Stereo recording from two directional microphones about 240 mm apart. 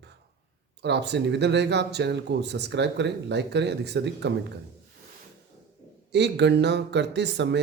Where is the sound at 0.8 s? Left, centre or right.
Right.